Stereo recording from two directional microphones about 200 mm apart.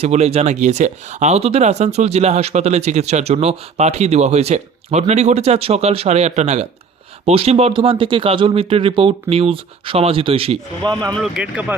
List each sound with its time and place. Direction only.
0.0 s speech: 30° right (ahead or behind)
11.1 s speech: centre (ahead or behind)